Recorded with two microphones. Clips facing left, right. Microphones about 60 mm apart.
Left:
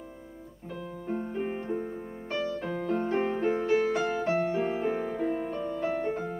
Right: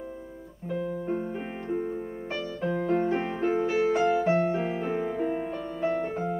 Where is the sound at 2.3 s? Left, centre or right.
Centre.